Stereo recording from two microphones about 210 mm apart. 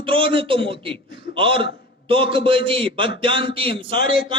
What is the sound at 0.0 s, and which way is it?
A man's voice, 25° right (ahead or behind).